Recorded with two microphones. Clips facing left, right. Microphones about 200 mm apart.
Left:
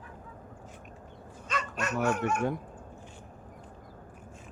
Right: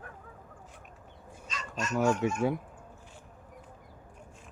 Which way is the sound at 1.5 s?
60° left (ahead or behind).